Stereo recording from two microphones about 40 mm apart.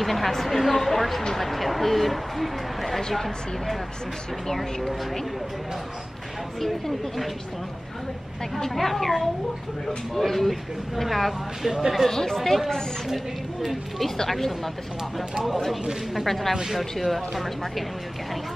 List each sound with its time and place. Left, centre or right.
0.0 s speech: centre
6.6 s speech: centre
8.5 s speech: centre
12.1 s speech: centre
14.1 s speech: centre
15.1 s speech: centre
16.3 s speech: centre